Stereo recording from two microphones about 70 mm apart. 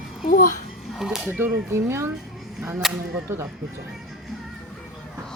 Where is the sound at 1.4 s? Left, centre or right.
Right.